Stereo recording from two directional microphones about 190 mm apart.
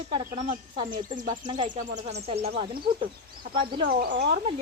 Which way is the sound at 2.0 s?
35° right (ahead or behind).